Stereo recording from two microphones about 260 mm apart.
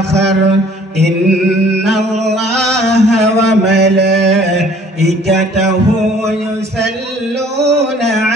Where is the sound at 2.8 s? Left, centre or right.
Centre.